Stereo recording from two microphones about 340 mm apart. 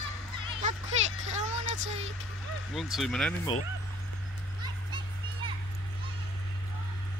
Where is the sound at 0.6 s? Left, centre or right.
Centre.